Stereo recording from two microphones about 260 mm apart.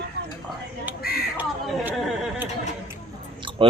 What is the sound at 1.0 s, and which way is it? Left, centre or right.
Speech, left.